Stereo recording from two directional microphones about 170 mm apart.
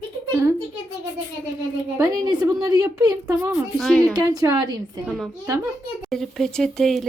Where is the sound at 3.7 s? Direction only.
Centre (ahead or behind).